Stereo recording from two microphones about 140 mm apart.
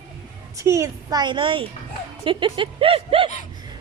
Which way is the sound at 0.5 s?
20° right (ahead or behind).